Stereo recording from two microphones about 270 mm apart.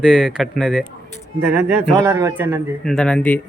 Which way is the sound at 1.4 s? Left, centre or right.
Centre.